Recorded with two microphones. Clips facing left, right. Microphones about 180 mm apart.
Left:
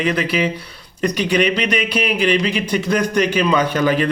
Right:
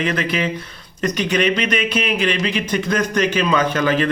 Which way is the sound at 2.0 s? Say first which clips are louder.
Left 3 dB; 10° left (ahead or behind).